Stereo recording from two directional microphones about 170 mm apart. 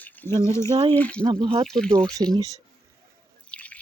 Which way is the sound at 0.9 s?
10° left (ahead or behind).